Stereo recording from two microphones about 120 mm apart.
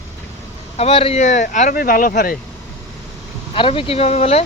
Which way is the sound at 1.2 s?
85° left.